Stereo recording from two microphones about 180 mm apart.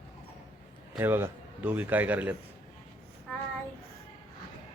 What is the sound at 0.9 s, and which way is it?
A man's voice, 10° right (ahead or behind).